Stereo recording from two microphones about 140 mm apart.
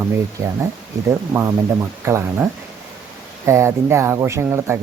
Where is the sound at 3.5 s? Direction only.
20° right (ahead or behind).